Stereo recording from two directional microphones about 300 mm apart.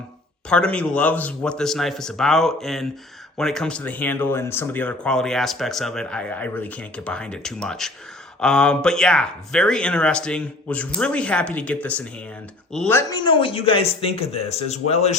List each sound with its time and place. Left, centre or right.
0.5 s speech: centre; by 15.1 s left